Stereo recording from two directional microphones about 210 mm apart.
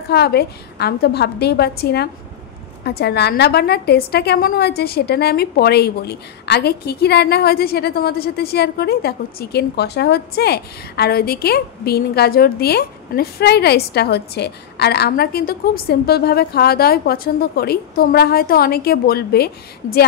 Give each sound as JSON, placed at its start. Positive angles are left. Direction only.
{"t": 0.1, "sound": "a woman's voice", "side_deg": 50}